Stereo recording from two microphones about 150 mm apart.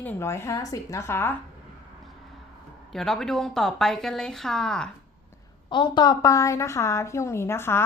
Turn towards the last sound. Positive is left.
turn(degrees=15)  # may be behind; listen again after turning